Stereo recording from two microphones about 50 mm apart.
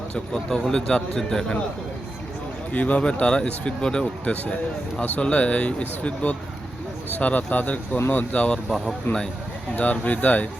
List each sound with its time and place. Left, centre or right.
0.3 s a man's voice: centre
2.7 s speech: left
9.1 s speech: left
9.7 s speech: left